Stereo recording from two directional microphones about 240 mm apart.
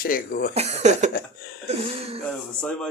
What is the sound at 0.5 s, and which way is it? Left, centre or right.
Speech, right.